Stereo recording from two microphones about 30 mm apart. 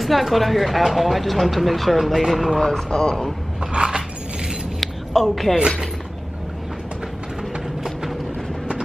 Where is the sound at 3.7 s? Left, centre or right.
Right.